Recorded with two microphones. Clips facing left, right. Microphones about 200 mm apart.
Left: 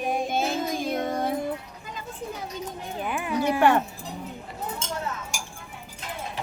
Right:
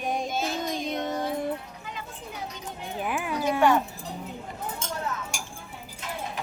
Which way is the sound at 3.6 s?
60° left (ahead or behind).